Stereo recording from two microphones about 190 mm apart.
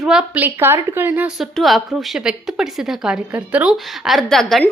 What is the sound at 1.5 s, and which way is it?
A woman's voice, centre (ahead or behind).